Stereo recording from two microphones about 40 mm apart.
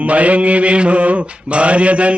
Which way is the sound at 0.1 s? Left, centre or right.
Right.